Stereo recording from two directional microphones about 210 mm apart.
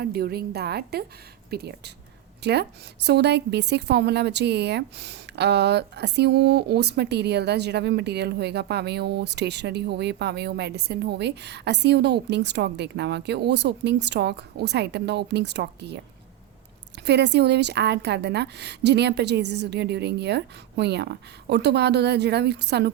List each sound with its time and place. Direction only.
0.0 s a woman's voice: 45° right (ahead or behind)
17.1 s a woman's voice: 55° right (ahead or behind)